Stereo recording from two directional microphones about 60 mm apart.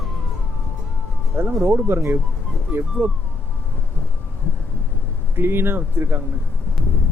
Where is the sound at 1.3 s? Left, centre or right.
Right.